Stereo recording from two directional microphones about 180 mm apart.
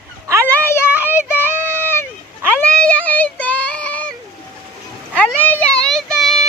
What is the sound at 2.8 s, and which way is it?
Child singing, 5° left (ahead or behind).